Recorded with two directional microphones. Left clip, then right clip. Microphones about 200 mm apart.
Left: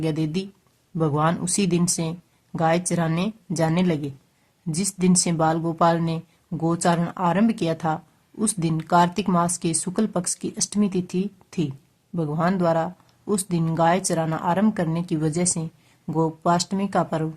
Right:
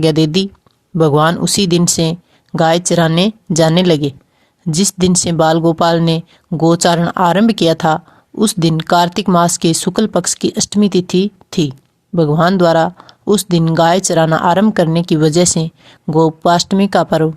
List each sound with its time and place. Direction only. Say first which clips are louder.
0.0 s speech: right 14 dB; 35° right (ahead or behind)